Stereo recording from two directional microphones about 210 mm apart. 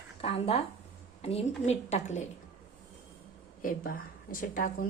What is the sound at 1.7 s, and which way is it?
Speech, 30° left (ahead or behind).